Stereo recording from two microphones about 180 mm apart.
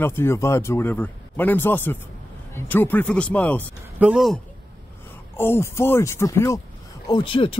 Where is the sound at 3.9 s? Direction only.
5° right (ahead or behind).